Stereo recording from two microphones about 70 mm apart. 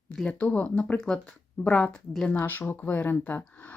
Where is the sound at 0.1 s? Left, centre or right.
Centre.